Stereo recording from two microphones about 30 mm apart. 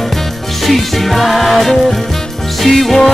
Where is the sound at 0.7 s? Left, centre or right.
Centre.